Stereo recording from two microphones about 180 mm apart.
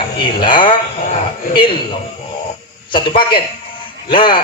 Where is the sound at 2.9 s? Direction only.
25° left (ahead or behind).